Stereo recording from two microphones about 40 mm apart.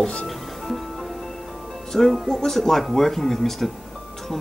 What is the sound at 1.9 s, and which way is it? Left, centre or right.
Speech, centre.